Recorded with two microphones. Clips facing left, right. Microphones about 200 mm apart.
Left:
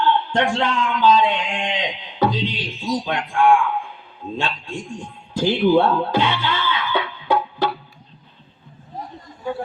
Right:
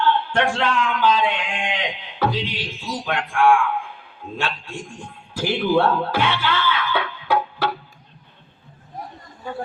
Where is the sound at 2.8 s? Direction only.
15° left (ahead or behind).